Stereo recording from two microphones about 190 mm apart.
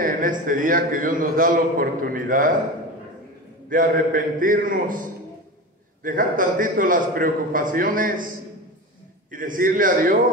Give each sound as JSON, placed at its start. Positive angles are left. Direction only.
{"t": 0.0, "sound": "a man's voice", "side_deg": -45}
{"t": 3.6, "sound": "a man's voice", "side_deg": -45}
{"t": 6.0, "sound": "a man's voice", "side_deg": -45}
{"t": 9.3, "sound": "a man's voice", "side_deg": -45}